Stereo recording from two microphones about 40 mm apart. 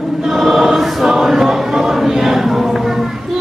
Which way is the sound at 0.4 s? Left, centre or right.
Centre.